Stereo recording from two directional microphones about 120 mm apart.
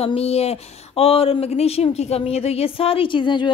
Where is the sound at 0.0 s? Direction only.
55° left (ahead or behind).